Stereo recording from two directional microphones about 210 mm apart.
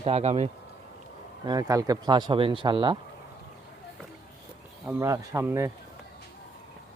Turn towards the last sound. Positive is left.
turn(degrees=-15)  # may be behind; listen again after turning